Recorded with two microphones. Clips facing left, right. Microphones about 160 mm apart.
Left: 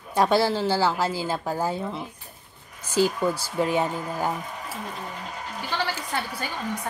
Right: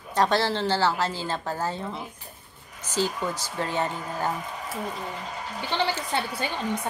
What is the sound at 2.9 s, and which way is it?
A woman's voice, 10° left (ahead or behind).